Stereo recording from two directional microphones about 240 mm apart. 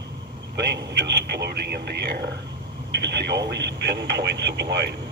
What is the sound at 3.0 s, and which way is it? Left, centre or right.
Speech, right.